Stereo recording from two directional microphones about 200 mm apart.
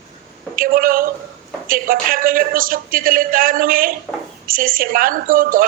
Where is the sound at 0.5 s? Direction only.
45° right (ahead or behind).